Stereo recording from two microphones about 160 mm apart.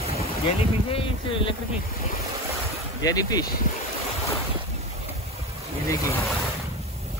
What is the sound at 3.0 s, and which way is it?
Speech, 25° left (ahead or behind).